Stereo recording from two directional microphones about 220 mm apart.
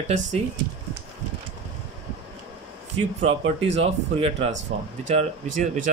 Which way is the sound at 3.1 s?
30° right (ahead or behind).